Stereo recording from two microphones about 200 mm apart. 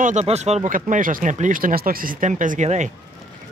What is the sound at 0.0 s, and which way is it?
Speech, 35° right (ahead or behind).